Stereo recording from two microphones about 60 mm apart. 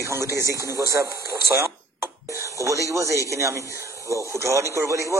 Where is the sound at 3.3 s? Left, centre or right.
Right.